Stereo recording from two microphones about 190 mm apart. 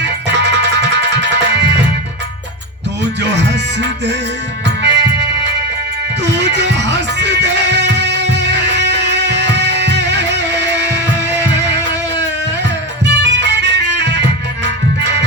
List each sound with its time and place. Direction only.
0.0 s music: 65° right (ahead or behind)
3.0 s music: 65° right (ahead or behind)
6.2 s music: 65° right (ahead or behind)